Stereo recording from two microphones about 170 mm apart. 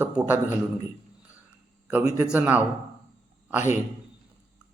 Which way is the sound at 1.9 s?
15° right (ahead or behind).